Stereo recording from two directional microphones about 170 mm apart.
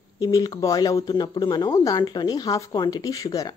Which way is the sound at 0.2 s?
20° left (ahead or behind).